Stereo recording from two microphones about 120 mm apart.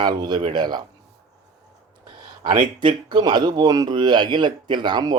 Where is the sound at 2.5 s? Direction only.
40° right (ahead or behind).